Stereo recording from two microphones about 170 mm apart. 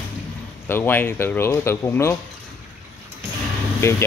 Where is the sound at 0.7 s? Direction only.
10° left (ahead or behind).